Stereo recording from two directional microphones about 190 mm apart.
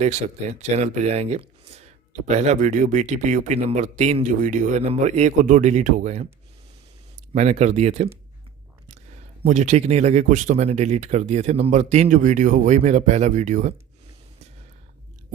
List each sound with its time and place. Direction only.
0.0 s speech: 35° right (ahead or behind)
7.3 s speech: 35° right (ahead or behind)